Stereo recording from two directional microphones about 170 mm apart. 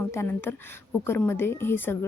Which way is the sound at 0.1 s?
15° left (ahead or behind).